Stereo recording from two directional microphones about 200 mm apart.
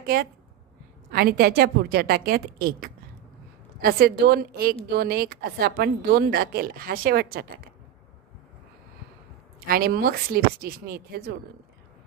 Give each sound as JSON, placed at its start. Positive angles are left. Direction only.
{"t": 0.0, "sound": "a woman's voice", "side_deg": -50}
{"t": 9.7, "sound": "speech", "side_deg": -50}